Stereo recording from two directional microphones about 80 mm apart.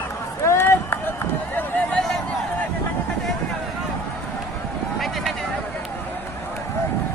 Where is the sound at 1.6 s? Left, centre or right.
Centre.